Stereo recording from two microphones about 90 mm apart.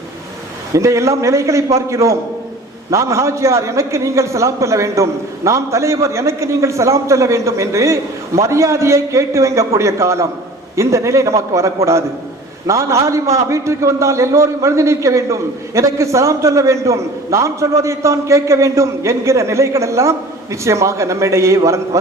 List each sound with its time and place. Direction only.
0.7 s a man's voice: 35° right (ahead or behind)